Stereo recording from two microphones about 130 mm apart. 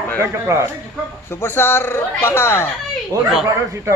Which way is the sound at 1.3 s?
20° left (ahead or behind).